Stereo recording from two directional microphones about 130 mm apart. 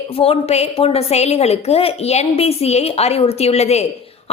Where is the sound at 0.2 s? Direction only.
50° left (ahead or behind).